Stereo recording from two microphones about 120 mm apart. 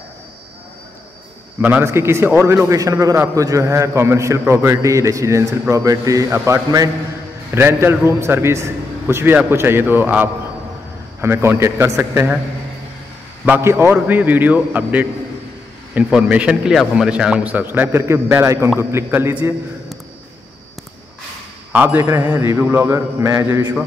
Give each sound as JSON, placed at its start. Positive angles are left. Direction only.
{"t": 1.6, "sound": "a man's voice", "side_deg": -15}
{"t": 13.5, "sound": "a man's voice", "side_deg": -20}
{"t": 21.7, "sound": "a man's voice", "side_deg": -15}